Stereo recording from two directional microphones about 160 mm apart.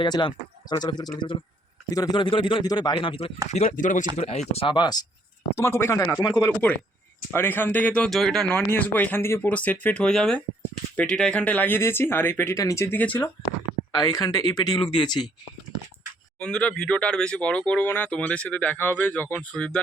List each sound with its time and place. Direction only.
0.0 s speech: 30° left (ahead or behind)
3.5 s speech: 45° left (ahead or behind)
4.2 s speech: 40° left (ahead or behind)
5.5 s speech: 15° left (ahead or behind)
13.9 s speech: 25° left (ahead or behind)
16.4 s speech: 5° left (ahead or behind)